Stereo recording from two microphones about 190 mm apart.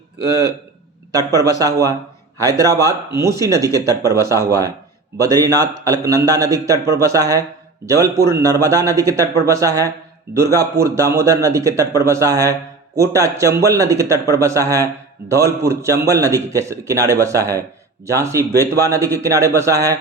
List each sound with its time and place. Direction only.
1.3 s a man's voice: 20° right (ahead or behind)